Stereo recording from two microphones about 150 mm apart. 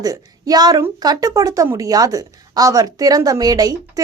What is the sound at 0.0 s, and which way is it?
A woman's voice, 25° right (ahead or behind).